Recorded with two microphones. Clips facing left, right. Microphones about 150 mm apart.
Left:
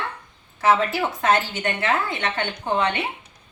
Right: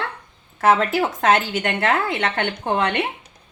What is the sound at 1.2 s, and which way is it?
A woman's voice, 75° right (ahead or behind).